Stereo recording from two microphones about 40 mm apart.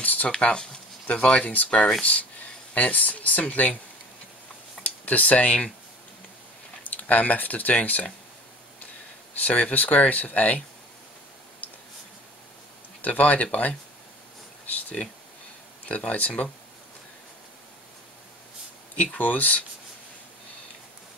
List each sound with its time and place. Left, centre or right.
0.0 s a sound: left
0.3 s speech: left
1.1 s speech: left
1.5 s speech: left
4.8 s speech: left
6.8 s speech: left
9.4 s speech: left
13.0 s speech: left
16.1 s speech: left
19.1 s speech: left